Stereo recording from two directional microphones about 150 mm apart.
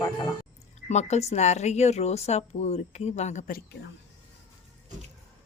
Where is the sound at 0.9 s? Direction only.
50° left (ahead or behind).